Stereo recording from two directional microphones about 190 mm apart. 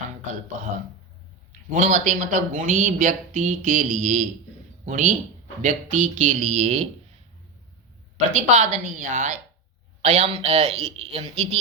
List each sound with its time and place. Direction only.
0.5 s a sound: 40° right (ahead or behind)
1.7 s a man's voice: 40° right (ahead or behind)
8.4 s a man's voice: 40° right (ahead or behind)